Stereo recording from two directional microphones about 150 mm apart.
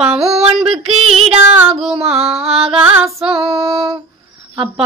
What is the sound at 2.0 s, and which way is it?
Mantra, 40° right (ahead or behind).